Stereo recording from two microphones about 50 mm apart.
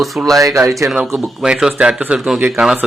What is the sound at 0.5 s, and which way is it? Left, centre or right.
Speech, right.